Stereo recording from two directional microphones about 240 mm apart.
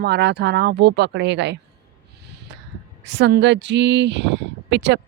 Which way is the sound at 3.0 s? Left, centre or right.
Right.